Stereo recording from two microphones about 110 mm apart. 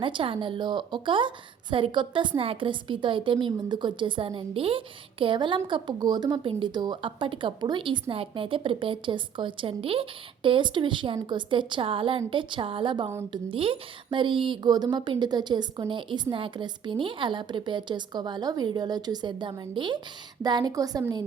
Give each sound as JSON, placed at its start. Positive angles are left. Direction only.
{"t": 0.0, "sound": "a woman's voice", "side_deg": -50}